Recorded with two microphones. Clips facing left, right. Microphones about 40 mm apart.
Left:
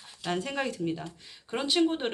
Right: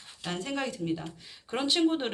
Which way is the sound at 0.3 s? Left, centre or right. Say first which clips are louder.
Left 2 dB; centre.